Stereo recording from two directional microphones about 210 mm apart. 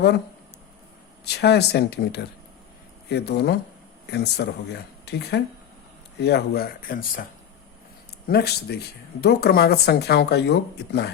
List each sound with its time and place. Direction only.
1.2 s speech: 50° left (ahead or behind)
8.3 s speech: 50° left (ahead or behind)